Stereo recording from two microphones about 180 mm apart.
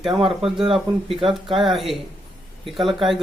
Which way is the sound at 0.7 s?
Centre (ahead or behind).